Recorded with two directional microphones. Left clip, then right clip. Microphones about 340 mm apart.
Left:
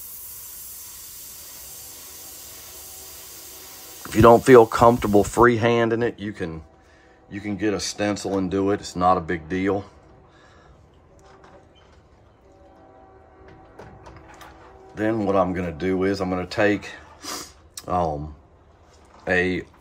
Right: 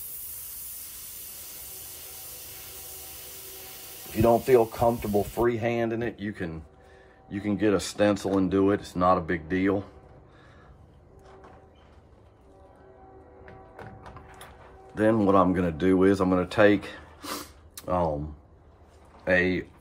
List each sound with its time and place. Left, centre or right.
4.2 s speech: left
5.5 s speech: left
7.2 s speech: centre
15.0 s speech: centre
16.8 s a sound: centre
19.2 s speech: centre